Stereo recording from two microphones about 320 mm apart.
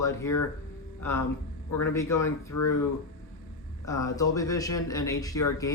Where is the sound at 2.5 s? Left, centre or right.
Left.